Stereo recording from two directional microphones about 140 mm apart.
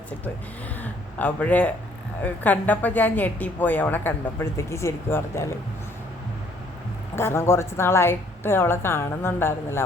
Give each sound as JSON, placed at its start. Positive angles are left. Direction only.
{"t": 0.8, "sound": "a man's voice", "side_deg": 10}
{"t": 7.2, "sound": "a woman's voice", "side_deg": 20}